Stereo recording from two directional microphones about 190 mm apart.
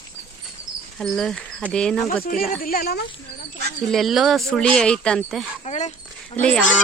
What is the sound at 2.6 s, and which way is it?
Speech, 50° left (ahead or behind).